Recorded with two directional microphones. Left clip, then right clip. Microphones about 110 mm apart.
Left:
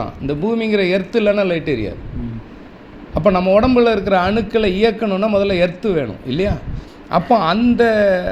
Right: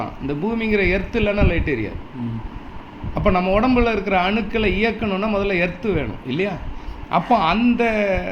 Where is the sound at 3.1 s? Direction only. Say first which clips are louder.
Left 5 dB; 50° left (ahead or behind).